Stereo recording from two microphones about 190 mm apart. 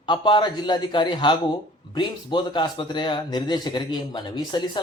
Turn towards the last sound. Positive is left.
turn(degrees=25)  # may be behind; listen again after turning